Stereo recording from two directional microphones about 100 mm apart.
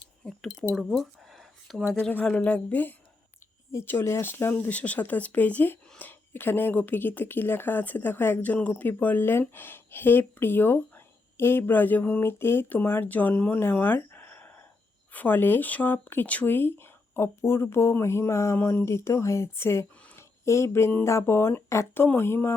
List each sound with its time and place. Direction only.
0.2 s chink: 10° left (ahead or behind)
0.7 s a sound: centre (ahead or behind)
1.9 s speech: 15° left (ahead or behind)